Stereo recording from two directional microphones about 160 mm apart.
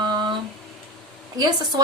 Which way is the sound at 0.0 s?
30° right (ahead or behind).